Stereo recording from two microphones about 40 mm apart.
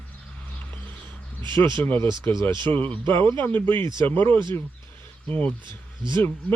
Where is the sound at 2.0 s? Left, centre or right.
Left.